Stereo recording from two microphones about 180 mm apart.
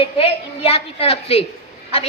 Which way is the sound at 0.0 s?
30° left (ahead or behind).